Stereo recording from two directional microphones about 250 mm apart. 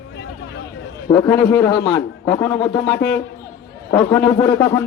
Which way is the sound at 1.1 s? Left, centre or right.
Centre.